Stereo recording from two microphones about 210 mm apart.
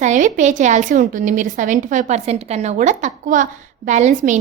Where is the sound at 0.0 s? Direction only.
35° right (ahead or behind).